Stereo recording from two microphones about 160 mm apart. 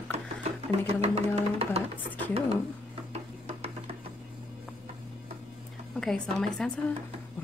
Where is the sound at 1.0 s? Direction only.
40° right (ahead or behind).